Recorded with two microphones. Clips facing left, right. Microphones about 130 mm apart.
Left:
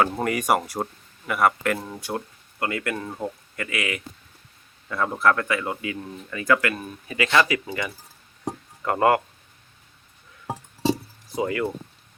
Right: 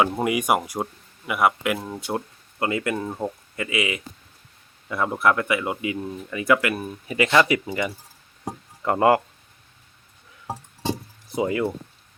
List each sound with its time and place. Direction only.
0.0 s speech: 10° right (ahead or behind)
2.0 s speech: 20° right (ahead or behind)
10.4 s music: centre (ahead or behind)
11.3 s speech: 20° right (ahead or behind)